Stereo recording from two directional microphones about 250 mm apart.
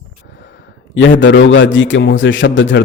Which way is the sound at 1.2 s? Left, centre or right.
Left.